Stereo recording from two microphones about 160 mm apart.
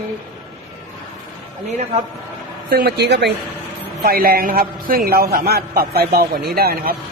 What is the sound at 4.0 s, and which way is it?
A man's voice, 70° right (ahead or behind).